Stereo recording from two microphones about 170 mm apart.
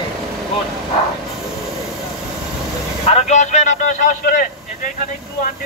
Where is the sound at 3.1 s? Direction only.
45° left (ahead or behind).